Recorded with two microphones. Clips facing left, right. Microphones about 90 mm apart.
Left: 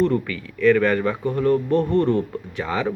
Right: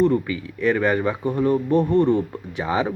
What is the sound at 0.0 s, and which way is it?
Speech, 10° right (ahead or behind).